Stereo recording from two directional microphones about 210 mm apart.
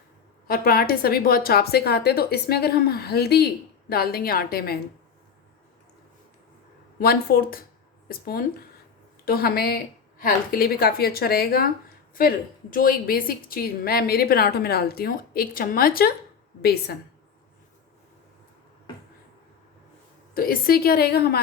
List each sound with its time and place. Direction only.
0.4 s a woman's voice: 45° left (ahead or behind)
7.0 s a woman's voice: 45° left (ahead or behind)
12.7 s a woman's voice: 40° left (ahead or behind)
20.3 s a woman's voice: 45° left (ahead or behind)